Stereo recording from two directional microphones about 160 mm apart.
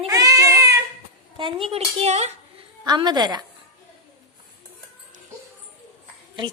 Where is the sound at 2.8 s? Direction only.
25° right (ahead or behind).